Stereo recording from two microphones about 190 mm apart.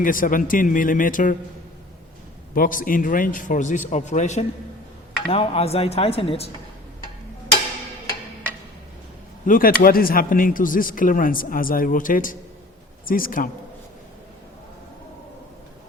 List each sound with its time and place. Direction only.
0.0 s speech: 45° left (ahead or behind)
2.6 s a man's voice: 45° left (ahead or behind)
9.5 s speech: 50° left (ahead or behind)